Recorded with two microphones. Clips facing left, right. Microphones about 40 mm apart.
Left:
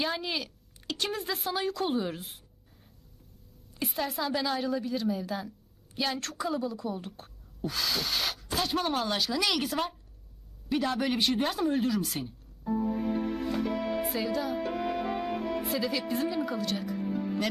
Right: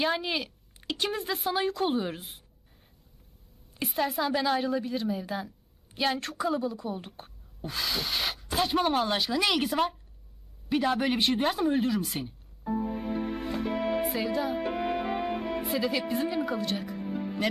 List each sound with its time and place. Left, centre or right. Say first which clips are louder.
0.0 s a woman's voice: right 3 dB; centre
3.9 s a woman's voice: right 4 dB; centre
6.7 s a woman's voice: right 1 dB; centre
12.1 s music: right 1 dB; centre
16.1 s speech: right 1 dB; centre
17.1 s music: right 1 dB; centre